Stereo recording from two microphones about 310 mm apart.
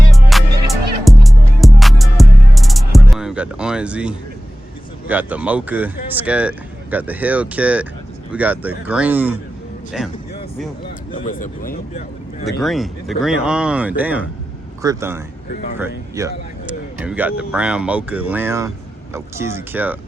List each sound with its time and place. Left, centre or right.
0.1 s music: centre
5.0 s speech: centre
11.1 s speech: left
12.6 s speech: centre